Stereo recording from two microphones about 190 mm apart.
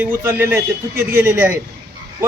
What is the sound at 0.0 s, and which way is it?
Speech, 15° right (ahead or behind).